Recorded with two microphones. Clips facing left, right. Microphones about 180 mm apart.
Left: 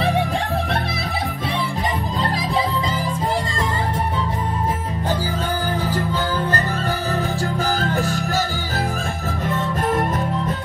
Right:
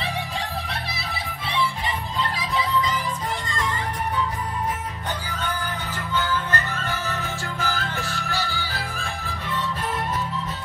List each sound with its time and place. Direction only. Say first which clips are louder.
2.1 s music: left 4 dB; 40° left (ahead or behind)
6.1 s music: left 4 dB; 35° left (ahead or behind)